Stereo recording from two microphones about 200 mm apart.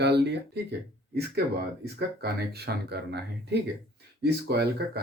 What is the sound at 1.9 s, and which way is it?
Speech, 55° right (ahead or behind).